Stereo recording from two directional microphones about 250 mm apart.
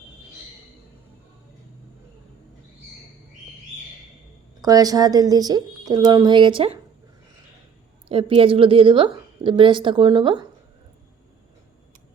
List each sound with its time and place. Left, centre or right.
4.6 s a woman's voice: centre
8.0 s a woman's voice: right